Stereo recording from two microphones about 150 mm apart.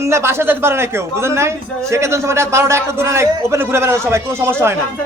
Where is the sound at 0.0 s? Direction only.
15° right (ahead or behind).